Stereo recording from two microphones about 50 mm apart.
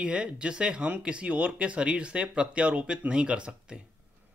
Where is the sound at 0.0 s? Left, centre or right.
Centre.